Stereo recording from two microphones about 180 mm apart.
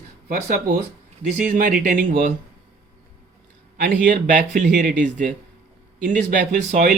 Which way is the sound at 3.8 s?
45° right (ahead or behind).